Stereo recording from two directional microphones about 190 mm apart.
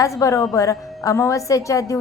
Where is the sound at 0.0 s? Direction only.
15° left (ahead or behind).